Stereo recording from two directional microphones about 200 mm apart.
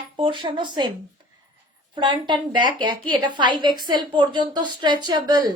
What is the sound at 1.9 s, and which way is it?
A woman's voice, 20° right (ahead or behind).